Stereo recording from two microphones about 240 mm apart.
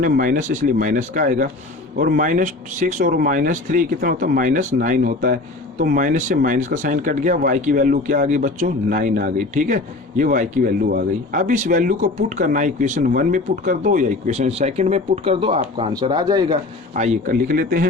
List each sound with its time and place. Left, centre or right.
0.0 s speech: right; by 16.6 s centre
16.9 s speech: right